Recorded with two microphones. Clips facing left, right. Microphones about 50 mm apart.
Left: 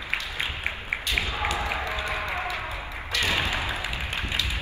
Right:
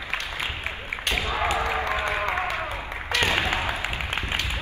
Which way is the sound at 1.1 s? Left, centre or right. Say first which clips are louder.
Right 4 dB; right.